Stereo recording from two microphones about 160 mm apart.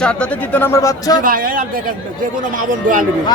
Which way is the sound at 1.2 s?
60° right (ahead or behind).